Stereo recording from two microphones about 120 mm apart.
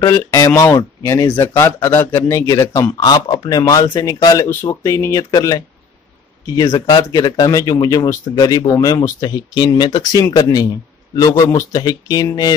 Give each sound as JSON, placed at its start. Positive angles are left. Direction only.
{"t": 0.0, "sound": "speech", "side_deg": 25}